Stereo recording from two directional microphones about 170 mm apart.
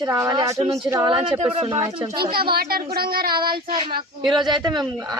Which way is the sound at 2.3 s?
65° right (ahead or behind).